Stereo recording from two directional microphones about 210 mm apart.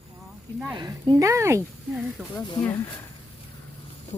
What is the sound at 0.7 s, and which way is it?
Speech, 20° right (ahead or behind).